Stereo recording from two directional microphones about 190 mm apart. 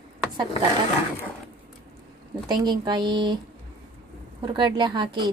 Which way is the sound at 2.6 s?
25° right (ahead or behind).